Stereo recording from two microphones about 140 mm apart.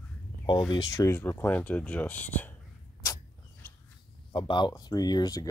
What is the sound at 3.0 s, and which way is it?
Arrow, 20° left (ahead or behind).